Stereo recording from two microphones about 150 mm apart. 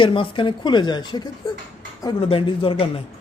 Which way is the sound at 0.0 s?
35° left (ahead or behind).